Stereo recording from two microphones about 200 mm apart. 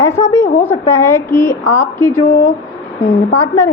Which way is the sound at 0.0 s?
15° left (ahead or behind).